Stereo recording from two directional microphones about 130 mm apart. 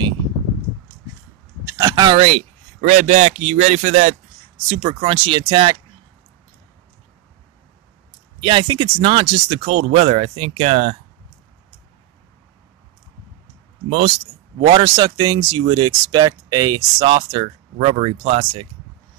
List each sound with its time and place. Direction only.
1.8 s a sound: 30° right (ahead or behind)
2.1 s speech: 50° right (ahead or behind)
2.8 s a man's voice: 90° right
3.3 s speech: 65° right (ahead or behind)
4.6 s speech: 45° right (ahead or behind)
8.4 s speech: 40° right (ahead or behind); by 11.0 s 55° right (ahead or behind)
13.8 s speech: 60° right (ahead or behind)
14.8 s speech: 30° right (ahead or behind); by 18.7 s 45° right (ahead or behind)